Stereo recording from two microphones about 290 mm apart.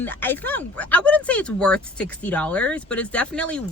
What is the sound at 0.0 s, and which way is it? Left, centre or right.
Speech, centre.